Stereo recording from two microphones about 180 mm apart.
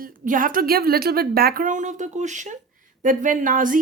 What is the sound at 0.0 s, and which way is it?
A woman's voice, 50° right (ahead or behind).